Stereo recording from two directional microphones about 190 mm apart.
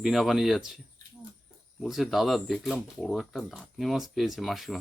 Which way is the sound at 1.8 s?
Centre (ahead or behind).